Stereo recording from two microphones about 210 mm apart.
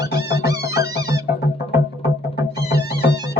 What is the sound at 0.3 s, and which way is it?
Music, 50° left (ahead or behind).